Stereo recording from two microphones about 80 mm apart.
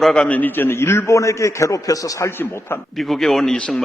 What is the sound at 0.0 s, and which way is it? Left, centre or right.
Speech, centre.